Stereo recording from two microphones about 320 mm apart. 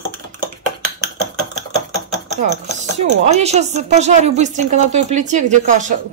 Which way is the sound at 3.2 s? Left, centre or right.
Centre.